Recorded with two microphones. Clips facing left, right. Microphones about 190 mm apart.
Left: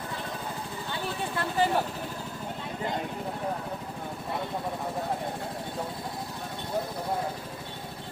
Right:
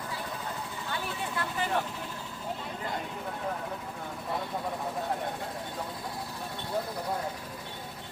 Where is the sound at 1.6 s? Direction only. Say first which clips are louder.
Left 9 dB; 35° left (ahead or behind).